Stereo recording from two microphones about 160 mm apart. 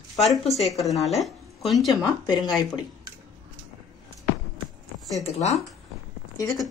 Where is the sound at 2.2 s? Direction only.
25° left (ahead or behind).